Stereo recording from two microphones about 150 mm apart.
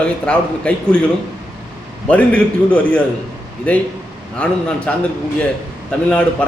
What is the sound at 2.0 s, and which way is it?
A man's voice, 10° left (ahead or behind).